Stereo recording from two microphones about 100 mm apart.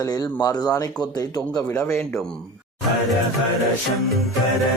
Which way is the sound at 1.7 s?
25° left (ahead or behind).